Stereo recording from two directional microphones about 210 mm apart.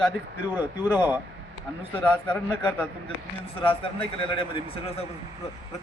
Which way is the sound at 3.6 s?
25° left (ahead or behind).